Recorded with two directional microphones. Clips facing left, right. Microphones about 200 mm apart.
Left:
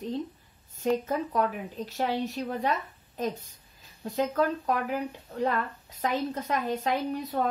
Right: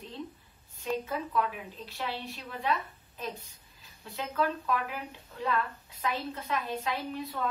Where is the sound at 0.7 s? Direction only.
40° left (ahead or behind).